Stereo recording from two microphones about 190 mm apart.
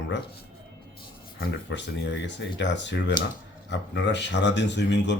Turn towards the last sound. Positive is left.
turn(degrees=65)  # may be behind; listen again after turning